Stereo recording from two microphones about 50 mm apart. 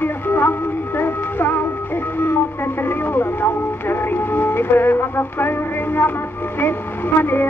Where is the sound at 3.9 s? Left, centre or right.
Left.